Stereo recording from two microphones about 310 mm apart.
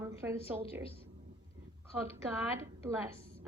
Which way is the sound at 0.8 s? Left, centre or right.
Centre.